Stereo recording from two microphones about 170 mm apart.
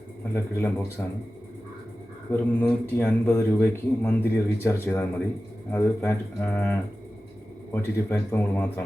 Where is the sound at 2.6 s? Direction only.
10° left (ahead or behind).